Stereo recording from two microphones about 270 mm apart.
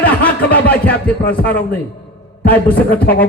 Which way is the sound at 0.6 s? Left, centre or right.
Centre.